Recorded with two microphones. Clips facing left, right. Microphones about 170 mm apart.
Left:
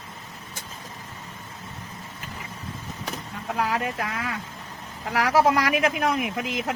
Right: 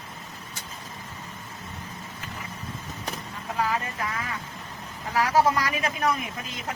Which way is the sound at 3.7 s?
75° left (ahead or behind).